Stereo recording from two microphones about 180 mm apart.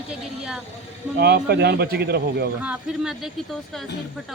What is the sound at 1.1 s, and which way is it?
Speech, 65° right (ahead or behind).